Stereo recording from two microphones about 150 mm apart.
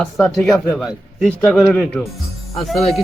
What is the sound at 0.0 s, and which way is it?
Speech, centre (ahead or behind).